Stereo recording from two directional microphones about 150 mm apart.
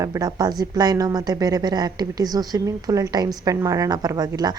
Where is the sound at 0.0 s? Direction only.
25° right (ahead or behind).